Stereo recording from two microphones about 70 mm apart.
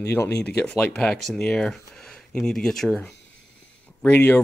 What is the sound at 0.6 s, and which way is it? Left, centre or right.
Speech, centre.